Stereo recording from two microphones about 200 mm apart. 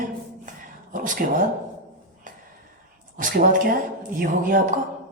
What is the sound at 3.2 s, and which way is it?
Speech, 40° right (ahead or behind).